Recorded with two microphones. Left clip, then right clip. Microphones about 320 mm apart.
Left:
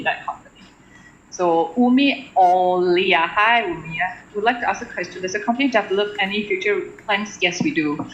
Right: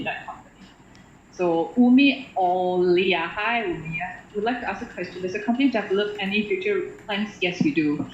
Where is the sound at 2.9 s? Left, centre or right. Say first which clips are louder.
Left 4 dB; left.